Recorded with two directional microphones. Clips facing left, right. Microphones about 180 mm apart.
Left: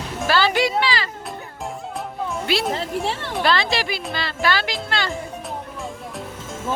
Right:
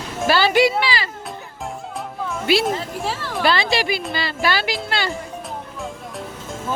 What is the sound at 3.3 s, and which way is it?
Speech, 5° right (ahead or behind).